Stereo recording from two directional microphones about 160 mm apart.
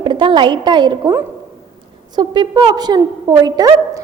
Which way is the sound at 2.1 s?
30° right (ahead or behind).